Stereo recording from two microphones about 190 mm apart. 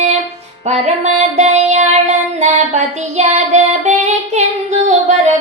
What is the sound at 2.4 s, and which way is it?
Child singing, 35° right (ahead or behind).